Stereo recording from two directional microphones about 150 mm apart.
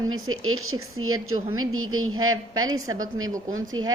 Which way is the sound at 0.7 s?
30° right (ahead or behind).